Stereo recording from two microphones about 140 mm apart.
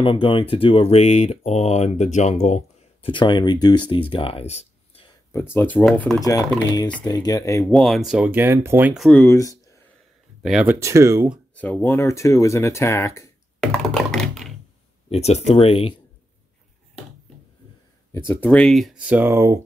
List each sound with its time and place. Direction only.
0.0 s speech: 35° left (ahead or behind)
3.1 s speech: 35° left (ahead or behind)
5.3 s speech: 15° left (ahead or behind)
5.9 s speech: 5° left (ahead or behind)
6.2 s speech: 25° left (ahead or behind)
7.6 s speech: 5° left (ahead or behind); by 8.9 s 15° right (ahead or behind)
9.1 s speech: 20° left (ahead or behind)
10.4 s speech: 5° right (ahead or behind)
10.7 s speech: 20° right (ahead or behind)
11.5 s speech: 10° left (ahead or behind)
13.6 s computer keyboard: 5° left (ahead or behind)
15.0 s speech: 50° left (ahead or behind)
18.1 s speech: 15° left (ahead or behind)
18.9 s speech: 10° right (ahead or behind)